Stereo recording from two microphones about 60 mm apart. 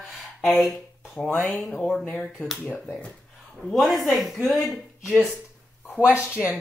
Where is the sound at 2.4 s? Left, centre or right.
Centre.